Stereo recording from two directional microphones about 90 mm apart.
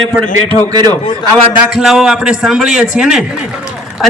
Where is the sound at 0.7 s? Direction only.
50° right (ahead or behind).